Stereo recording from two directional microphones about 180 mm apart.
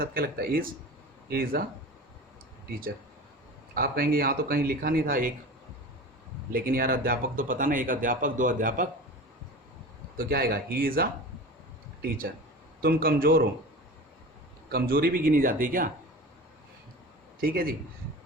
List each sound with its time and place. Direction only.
0.0 s speech: 55° right (ahead or behind)
3.8 s speech: 55° right (ahead or behind)
6.5 s speech: 55° right (ahead or behind)
10.2 s speech: 55° right (ahead or behind)
14.7 s speech: 55° right (ahead or behind)
17.4 s speech: 55° right (ahead or behind)